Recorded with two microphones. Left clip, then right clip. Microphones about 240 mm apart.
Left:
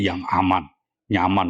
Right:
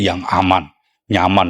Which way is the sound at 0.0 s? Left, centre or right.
Right.